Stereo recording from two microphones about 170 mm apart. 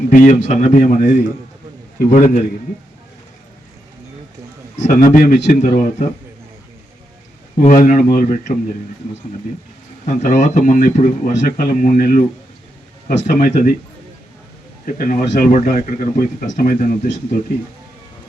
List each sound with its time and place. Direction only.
0.1 s speech: 50° left (ahead or behind)
4.8 s speech: 50° left (ahead or behind)
7.6 s speech: 45° left (ahead or behind)
10.2 s speech: 45° left (ahead or behind)
14.8 s speech: 55° left (ahead or behind)